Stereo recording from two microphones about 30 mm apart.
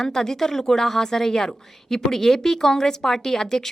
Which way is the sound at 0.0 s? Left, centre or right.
Centre.